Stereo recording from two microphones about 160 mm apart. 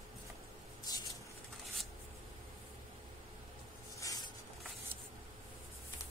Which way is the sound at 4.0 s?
20° left (ahead or behind).